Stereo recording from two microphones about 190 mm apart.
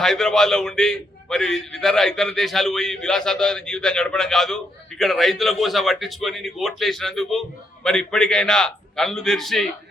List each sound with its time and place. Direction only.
0.0 s a man's voice: centre (ahead or behind)